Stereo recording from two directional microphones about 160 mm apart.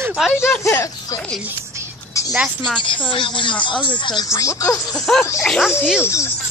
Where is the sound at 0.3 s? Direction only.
15° left (ahead or behind).